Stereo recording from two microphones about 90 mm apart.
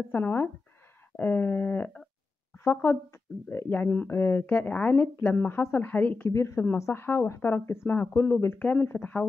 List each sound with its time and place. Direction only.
0.1 s speech: 25° left (ahead or behind)
6.3 s speech: 30° left (ahead or behind)